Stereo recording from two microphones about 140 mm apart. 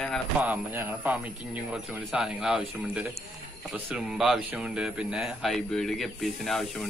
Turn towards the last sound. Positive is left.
turn(degrees=0)  # may be behind; listen again after turning